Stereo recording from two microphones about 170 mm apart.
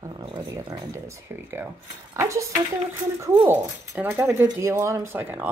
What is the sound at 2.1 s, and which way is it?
Speech, 20° right (ahead or behind).